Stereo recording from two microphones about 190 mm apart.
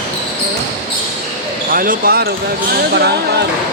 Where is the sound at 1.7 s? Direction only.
50° right (ahead or behind).